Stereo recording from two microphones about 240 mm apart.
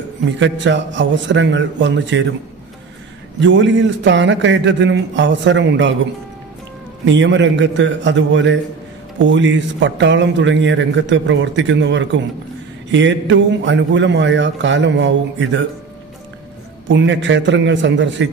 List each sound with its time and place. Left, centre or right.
0.2 s a man's voice: right
3.3 s a man's voice: right
7.1 s a man's voice: right
16.8 s a man's voice: right